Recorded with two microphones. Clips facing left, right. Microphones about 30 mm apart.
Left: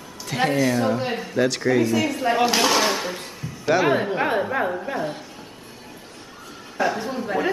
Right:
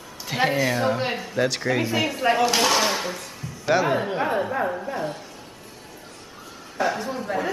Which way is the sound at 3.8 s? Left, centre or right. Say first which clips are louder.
Left 3 dB; centre.